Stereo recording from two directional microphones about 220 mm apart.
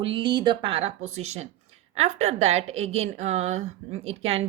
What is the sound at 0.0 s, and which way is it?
Speech, 20° right (ahead or behind).